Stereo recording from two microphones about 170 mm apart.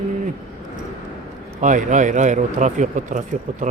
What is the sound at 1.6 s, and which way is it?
Speech, 50° right (ahead or behind).